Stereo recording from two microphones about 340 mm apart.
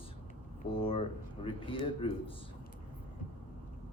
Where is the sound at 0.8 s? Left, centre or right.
Centre.